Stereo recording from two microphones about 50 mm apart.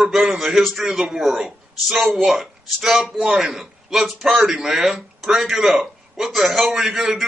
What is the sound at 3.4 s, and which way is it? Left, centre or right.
Speech, centre.